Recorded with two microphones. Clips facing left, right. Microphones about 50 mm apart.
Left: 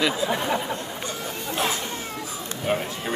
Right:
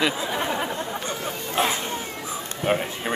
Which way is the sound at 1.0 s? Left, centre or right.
Right.